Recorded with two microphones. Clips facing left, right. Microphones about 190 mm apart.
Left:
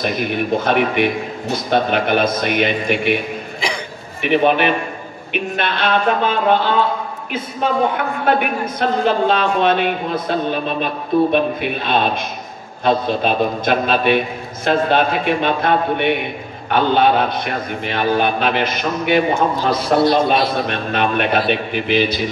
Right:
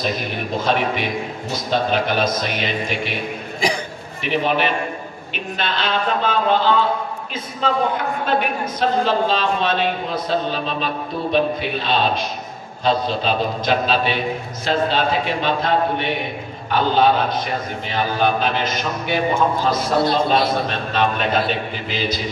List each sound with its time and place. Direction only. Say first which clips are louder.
0.0 s a man's voice: left 4 dB; 60° left (ahead or behind)
4.2 s a man's voice: left 5 dB; 60° left (ahead or behind)
8.3 s a man's voice: left 5 dB; 60° left (ahead or behind)